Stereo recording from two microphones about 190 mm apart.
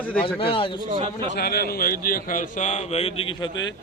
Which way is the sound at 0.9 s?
30° right (ahead or behind).